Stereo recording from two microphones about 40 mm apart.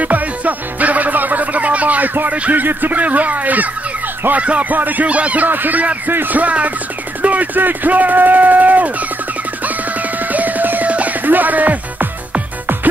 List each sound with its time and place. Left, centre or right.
0.0 s music: right
2.2 s speech: right
2.6 s speech: right
5.0 s speech: right
5.5 s speech: right
9.7 s music: right
10.9 s music: right
11.2 s music: right